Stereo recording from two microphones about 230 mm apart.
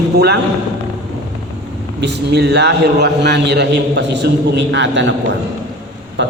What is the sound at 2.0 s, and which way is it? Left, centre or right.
A man's voice, right.